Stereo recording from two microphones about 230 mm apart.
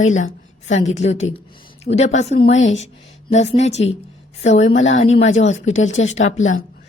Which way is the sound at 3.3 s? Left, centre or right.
Left.